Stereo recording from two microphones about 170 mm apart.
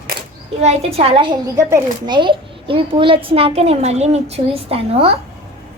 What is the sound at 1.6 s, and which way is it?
Speech, 15° right (ahead or behind).